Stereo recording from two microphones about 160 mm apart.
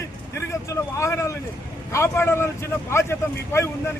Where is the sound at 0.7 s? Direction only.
20° left (ahead or behind).